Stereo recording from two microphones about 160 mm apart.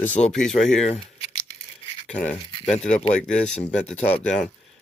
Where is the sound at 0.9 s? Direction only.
40° left (ahead or behind).